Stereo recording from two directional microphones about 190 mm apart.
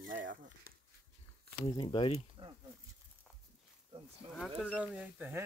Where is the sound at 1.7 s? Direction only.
25° left (ahead or behind).